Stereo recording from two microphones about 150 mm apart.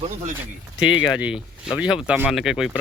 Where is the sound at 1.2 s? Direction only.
5° right (ahead or behind).